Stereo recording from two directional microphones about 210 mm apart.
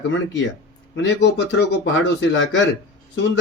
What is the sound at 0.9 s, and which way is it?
Speech, 60° left (ahead or behind).